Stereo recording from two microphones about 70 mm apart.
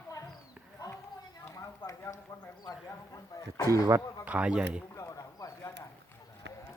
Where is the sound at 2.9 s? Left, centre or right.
Left.